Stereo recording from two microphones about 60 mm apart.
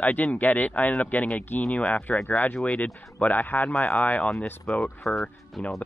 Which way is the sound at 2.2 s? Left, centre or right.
Left.